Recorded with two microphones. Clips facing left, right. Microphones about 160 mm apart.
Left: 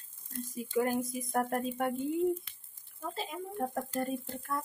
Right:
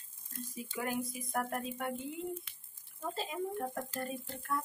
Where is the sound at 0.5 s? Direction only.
45° left (ahead or behind).